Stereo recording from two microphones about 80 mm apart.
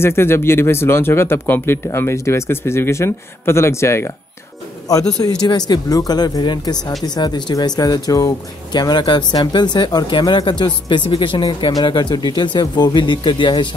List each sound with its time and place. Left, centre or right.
0.0 s speech: left
1.9 s speech: left
4.9 s a man's voice: left